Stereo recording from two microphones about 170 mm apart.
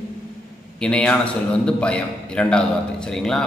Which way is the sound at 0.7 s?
5° left (ahead or behind).